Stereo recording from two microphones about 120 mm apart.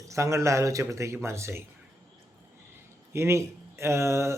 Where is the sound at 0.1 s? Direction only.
25° right (ahead or behind).